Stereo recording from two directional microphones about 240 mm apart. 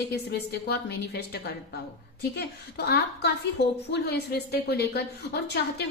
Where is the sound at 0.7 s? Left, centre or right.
Left.